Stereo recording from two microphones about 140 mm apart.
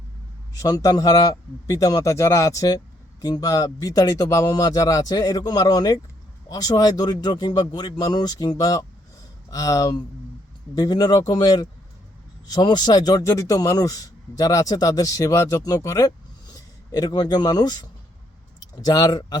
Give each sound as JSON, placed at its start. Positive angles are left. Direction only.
{"t": 0.6, "sound": "a man's voice", "side_deg": 25}
{"t": 18.9, "sound": "a man's voice", "side_deg": 30}